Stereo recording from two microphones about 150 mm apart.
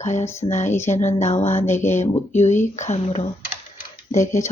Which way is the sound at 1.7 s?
15° left (ahead or behind).